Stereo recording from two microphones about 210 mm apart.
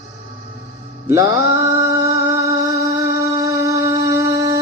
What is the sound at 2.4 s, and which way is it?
Music, 15° right (ahead or behind).